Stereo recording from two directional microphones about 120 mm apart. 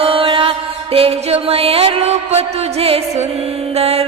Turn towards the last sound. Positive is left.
turn(degrees=-55)  # may be behind; listen again after turning